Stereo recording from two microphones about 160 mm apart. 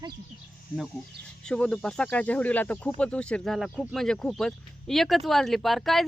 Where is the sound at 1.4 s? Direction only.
5° left (ahead or behind).